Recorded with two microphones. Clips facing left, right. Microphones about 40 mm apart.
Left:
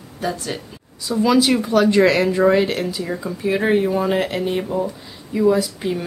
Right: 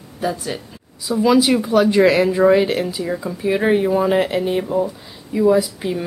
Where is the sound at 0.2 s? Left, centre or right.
Centre.